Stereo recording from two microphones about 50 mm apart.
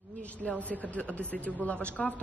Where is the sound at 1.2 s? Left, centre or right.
Left.